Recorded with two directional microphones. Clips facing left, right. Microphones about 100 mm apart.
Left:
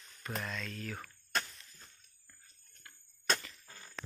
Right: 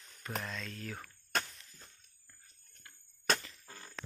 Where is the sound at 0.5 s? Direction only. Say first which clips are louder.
Left 1 dB; 20° right (ahead or behind).